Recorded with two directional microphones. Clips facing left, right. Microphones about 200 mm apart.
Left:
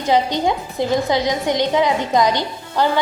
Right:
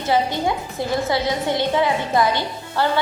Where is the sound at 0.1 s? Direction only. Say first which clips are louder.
Left 3 dB; 20° left (ahead or behind).